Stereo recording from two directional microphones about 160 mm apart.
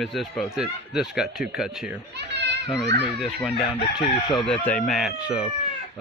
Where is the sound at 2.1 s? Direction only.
90° right.